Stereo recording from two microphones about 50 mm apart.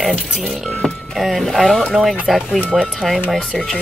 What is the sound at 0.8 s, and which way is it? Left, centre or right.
A woman's voice, centre.